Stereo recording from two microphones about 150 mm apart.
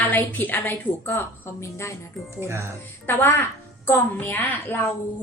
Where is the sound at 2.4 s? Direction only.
15° right (ahead or behind).